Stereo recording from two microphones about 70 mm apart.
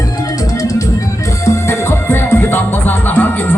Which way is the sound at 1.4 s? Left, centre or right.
Left.